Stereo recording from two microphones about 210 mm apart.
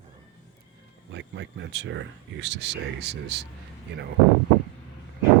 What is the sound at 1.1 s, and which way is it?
Speech, 60° right (ahead or behind).